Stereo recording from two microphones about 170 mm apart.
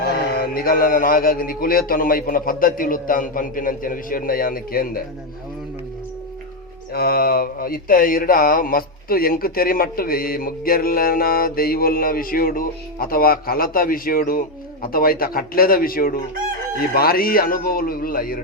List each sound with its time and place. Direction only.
0.0 s mantra: 65° left (ahead or behind)
6.9 s mantra: 65° left (ahead or behind)